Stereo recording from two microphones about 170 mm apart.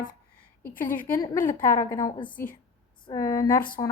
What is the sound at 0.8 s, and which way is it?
A woman's voice, 10° left (ahead or behind).